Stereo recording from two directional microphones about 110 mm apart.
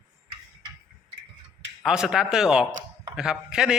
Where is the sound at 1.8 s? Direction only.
5° right (ahead or behind).